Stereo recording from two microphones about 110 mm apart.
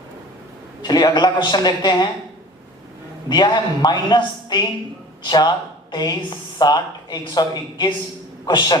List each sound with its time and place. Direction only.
0.8 s a woman's voice: 40° left (ahead or behind)
3.2 s a woman's voice: 40° left (ahead or behind)